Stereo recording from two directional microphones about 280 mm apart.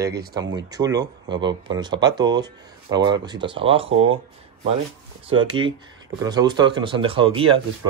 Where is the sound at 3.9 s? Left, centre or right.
Right.